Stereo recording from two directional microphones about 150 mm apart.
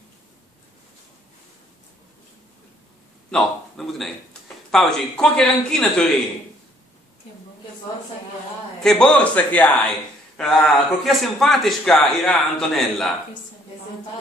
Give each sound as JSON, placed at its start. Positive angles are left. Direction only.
{"t": 3.3, "sound": "a man's voice", "side_deg": 5}
{"t": 8.8, "sound": "speech", "side_deg": 5}